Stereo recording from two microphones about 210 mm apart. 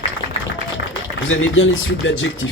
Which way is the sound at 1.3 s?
70° left (ahead or behind).